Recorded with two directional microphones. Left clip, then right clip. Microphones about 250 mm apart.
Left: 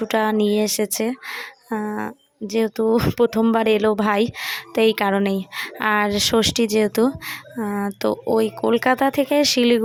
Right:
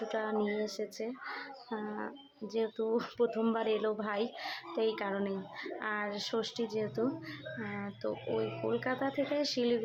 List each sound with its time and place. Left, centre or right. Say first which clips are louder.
0.1 s speech: left 15 dB; left